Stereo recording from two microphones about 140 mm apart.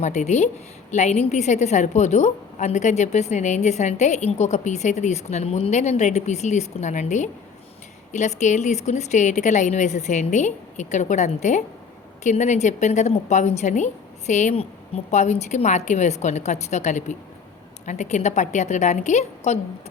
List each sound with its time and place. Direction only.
0.0 s a woman's voice: 55° left (ahead or behind)